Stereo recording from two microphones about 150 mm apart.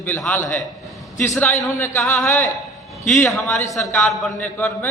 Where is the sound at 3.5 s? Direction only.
20° left (ahead or behind).